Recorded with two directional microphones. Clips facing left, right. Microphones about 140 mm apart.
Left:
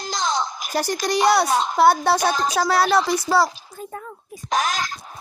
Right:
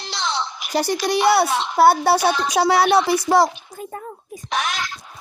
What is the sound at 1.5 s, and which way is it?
Speech, 40° left (ahead or behind).